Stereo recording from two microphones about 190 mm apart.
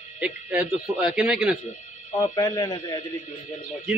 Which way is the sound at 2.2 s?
20° left (ahead or behind).